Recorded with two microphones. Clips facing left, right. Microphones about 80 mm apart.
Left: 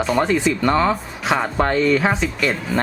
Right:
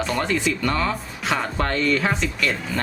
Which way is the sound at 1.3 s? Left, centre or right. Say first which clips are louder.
Left 6 dB; centre.